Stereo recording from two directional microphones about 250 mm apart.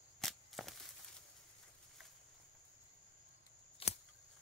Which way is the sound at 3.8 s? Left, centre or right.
Left.